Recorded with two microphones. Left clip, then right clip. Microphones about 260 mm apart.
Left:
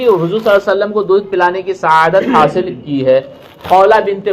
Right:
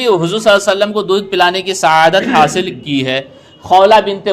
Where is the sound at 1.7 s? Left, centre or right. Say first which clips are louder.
Even; right.